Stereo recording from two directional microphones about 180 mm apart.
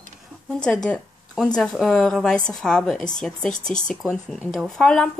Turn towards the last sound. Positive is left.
turn(degrees=5)  # may be behind; listen again after turning